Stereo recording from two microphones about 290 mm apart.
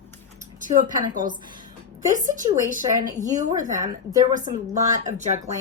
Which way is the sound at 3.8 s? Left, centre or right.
Centre.